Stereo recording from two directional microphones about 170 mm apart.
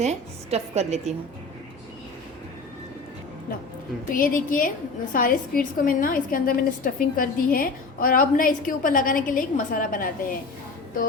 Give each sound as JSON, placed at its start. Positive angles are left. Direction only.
{"t": 0.0, "sound": "a woman's voice", "side_deg": -40}
{"t": 4.1, "sound": "a woman's voice", "side_deg": 55}